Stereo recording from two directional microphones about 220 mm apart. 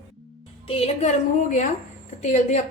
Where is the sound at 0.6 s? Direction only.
25° left (ahead or behind).